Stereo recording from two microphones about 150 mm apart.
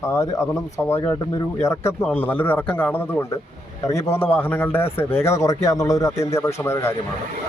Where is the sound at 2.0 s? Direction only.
10° left (ahead or behind).